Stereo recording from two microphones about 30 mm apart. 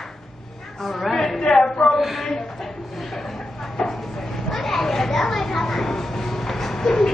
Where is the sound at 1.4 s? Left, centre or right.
Left.